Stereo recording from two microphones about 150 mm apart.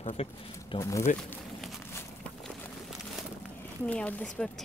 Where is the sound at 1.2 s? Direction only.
5° left (ahead or behind).